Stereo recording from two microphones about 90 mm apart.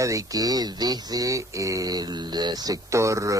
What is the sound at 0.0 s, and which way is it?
Speech, 35° right (ahead or behind).